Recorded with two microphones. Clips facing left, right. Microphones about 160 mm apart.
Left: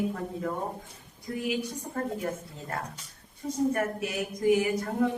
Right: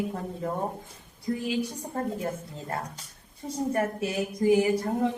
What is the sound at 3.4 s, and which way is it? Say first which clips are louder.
A woman's voice: even; 30° right (ahead or behind).